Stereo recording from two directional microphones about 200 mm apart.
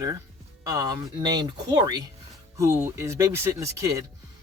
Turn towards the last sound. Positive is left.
turn(degrees=-15)  # may be behind; listen again after turning